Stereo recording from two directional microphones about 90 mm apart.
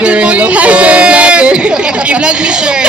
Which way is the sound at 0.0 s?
15° right (ahead or behind).